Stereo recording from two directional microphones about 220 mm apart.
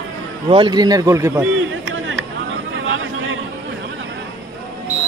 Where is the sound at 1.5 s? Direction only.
60° right (ahead or behind).